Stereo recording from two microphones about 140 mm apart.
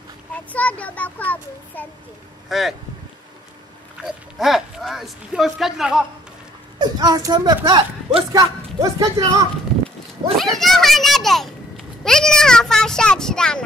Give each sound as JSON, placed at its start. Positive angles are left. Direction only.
{"t": 0.5, "sound": "a child's voice", "side_deg": 10}
{"t": 2.5, "sound": "a child's voice", "side_deg": 0}
{"t": 4.0, "sound": "speech", "side_deg": -5}
{"t": 6.8, "sound": "speech", "side_deg": -30}
{"t": 10.3, "sound": "a child's voice", "side_deg": 0}